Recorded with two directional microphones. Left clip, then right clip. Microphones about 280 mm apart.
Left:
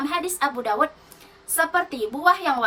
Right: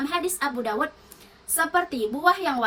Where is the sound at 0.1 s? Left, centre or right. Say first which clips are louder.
Left 2 dB; centre.